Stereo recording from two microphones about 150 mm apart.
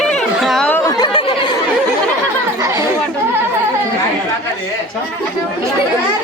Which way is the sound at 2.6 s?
15° right (ahead or behind).